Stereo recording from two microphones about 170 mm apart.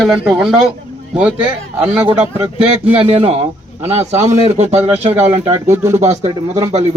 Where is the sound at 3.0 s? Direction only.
35° right (ahead or behind).